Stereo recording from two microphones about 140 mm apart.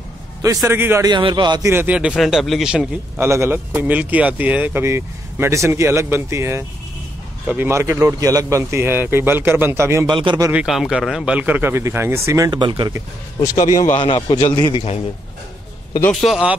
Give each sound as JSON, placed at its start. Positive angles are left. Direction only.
{"t": 0.4, "sound": "a man's voice", "side_deg": -25}
{"t": 1.0, "sound": "speech", "side_deg": -30}
{"t": 1.7, "sound": "speech", "side_deg": -10}
{"t": 3.2, "sound": "speech", "side_deg": -20}
{"t": 10.0, "sound": "speech", "side_deg": -35}
{"t": 10.5, "sound": "speech", "side_deg": -5}
{"t": 13.9, "sound": "a man's voice", "side_deg": 40}
{"t": 16.0, "sound": "speech", "side_deg": 5}